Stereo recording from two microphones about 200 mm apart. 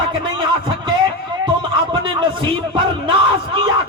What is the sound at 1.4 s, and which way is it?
Speech, 25° right (ahead or behind).